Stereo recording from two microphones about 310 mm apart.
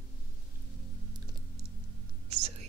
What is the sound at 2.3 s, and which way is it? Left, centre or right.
Whispering, centre.